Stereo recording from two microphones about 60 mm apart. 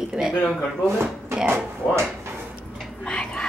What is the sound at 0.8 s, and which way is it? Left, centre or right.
Speech, right.